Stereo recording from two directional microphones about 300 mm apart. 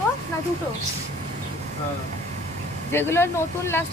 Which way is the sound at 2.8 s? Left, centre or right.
Centre.